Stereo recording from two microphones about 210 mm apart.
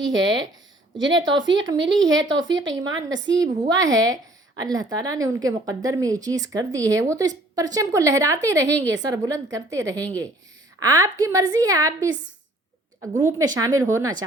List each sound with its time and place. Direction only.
0.0 s speech: 60° right (ahead or behind)
3.4 s speech: 15° right (ahead or behind)